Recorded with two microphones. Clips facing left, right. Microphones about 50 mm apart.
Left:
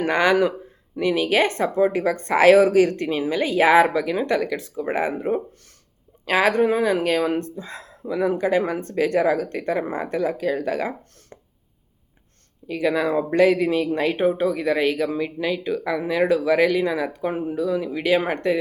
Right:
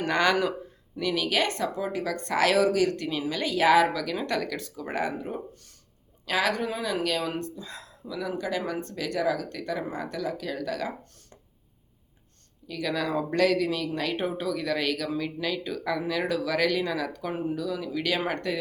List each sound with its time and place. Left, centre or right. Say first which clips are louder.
0.0 s speech: left 5 dB; centre
5.1 s speech: left 10 dB; left
12.6 s speech: left 8 dB; left